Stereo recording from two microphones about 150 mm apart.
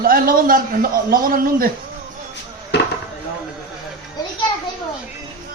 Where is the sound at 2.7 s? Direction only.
90° left.